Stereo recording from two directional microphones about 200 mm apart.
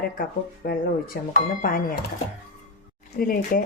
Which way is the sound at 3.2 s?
45° left (ahead or behind).